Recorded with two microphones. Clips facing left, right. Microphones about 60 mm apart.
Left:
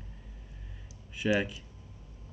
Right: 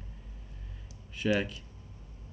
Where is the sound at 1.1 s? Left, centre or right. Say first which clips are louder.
Left 1 dB; centre.